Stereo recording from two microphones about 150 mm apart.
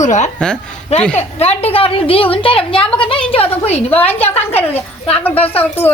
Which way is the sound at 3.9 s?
10° left (ahead or behind).